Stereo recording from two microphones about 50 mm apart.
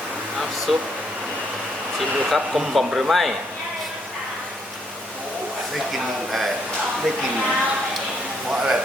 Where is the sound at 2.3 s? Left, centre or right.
Centre.